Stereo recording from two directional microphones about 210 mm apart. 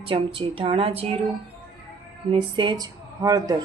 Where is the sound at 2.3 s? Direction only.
20° right (ahead or behind).